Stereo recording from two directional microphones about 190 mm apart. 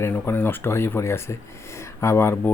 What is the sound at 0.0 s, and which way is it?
Speech, 10° left (ahead or behind).